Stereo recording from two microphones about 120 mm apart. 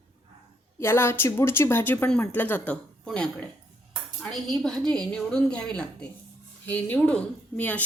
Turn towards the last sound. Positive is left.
turn(degrees=15)  # may be behind; listen again after turning